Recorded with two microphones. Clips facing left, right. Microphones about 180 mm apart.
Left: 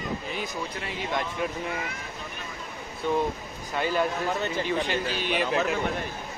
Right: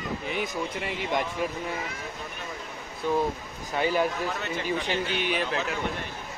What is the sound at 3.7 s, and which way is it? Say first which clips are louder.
Speech: right 1 dB; 15° right (ahead or behind).